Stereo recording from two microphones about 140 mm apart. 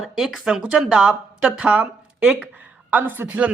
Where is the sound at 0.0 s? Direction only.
Centre (ahead or behind).